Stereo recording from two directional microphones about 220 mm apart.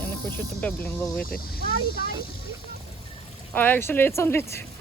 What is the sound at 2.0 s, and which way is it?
Speech, 45° left (ahead or behind).